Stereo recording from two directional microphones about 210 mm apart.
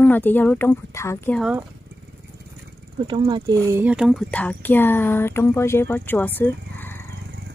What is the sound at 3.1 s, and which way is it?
Speech, 25° right (ahead or behind).